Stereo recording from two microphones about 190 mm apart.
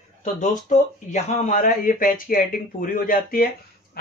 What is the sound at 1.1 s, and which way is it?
Speech, 40° left (ahead or behind).